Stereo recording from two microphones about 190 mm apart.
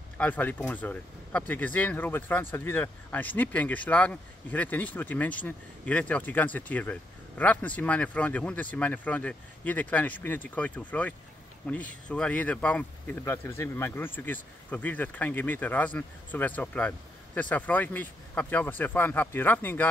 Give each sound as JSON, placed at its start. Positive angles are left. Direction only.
{"t": 0.2, "sound": "speech", "side_deg": 10}